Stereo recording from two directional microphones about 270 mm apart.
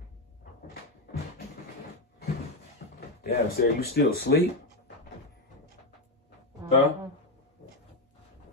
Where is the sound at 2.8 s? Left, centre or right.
Left.